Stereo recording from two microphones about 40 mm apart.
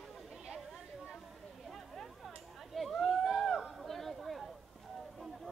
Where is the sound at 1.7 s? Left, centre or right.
Centre.